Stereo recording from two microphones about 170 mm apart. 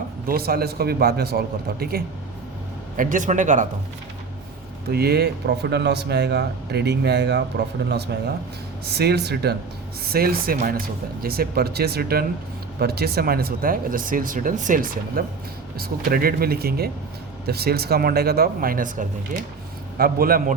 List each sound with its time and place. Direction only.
0.3 s speech: 60° right (ahead or behind)
3.0 s speech: 50° right (ahead or behind)
4.9 s speech: 70° right (ahead or behind)
8.9 s speech: 70° right (ahead or behind)
10.0 s speech: 65° right (ahead or behind)